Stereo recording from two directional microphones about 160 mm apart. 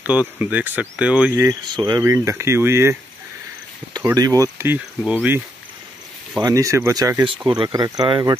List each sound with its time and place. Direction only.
0.0 s speech: 10° right (ahead or behind)
1.3 s speech: 20° right (ahead or behind)
2.0 s speech: 15° right (ahead or behind)
4.0 s speech: 20° right (ahead or behind)
6.4 s speech: 20° right (ahead or behind)